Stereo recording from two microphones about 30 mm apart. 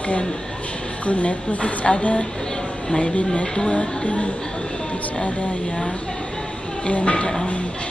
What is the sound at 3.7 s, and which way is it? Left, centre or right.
Speech, left.